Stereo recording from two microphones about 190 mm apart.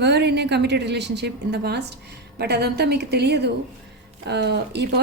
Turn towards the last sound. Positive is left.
turn(degrees=-60)  # may be behind; listen again after turning